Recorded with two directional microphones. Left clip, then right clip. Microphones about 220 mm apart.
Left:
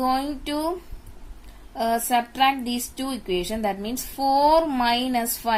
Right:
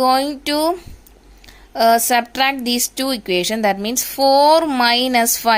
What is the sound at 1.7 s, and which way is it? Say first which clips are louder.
A woman's voice: right 9 dB; 35° right (ahead or behind).